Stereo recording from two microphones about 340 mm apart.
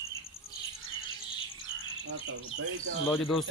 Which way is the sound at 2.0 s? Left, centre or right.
Right.